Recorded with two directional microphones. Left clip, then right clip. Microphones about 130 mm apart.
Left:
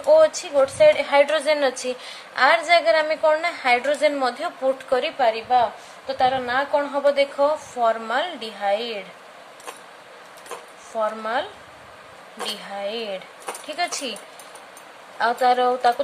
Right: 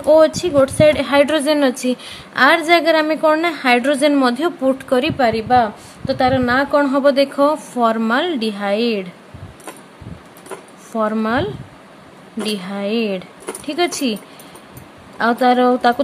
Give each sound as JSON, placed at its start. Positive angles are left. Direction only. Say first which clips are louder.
{"t": 0.1, "sound": "a woman's voice", "louder": "right 4 dB", "side_deg": -50}
{"t": 5.2, "sound": "a woman's voice", "louder": "right 4 dB", "side_deg": -90}
{"t": 11.0, "sound": "a woman's voice", "louder": "right 5 dB", "side_deg": -45}
{"t": 12.4, "sound": "a woman's voice", "louder": "right 6 dB", "side_deg": -45}
{"t": 15.1, "sound": "speech", "louder": "right 4 dB", "side_deg": -40}